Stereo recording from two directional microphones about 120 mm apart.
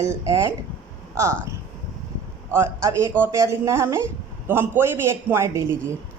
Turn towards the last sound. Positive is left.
turn(degrees=-25)  # may be behind; listen again after turning